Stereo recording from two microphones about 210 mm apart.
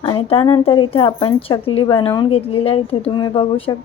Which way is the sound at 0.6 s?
20° left (ahead or behind).